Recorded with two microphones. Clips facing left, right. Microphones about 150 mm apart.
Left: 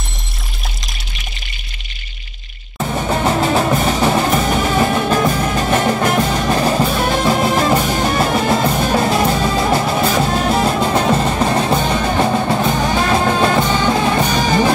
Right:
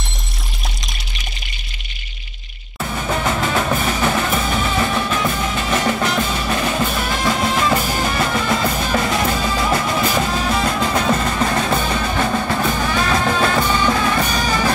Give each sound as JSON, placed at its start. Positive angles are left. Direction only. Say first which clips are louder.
{"t": 2.8, "sound": "music", "louder": "left 4 dB", "side_deg": 35}